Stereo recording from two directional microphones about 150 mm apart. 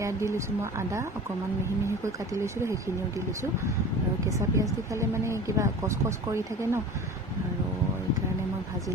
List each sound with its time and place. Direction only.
0.0 s speech: 20° right (ahead or behind)
2.4 s speech: 20° right (ahead or behind)
4.4 s speech: 20° right (ahead or behind)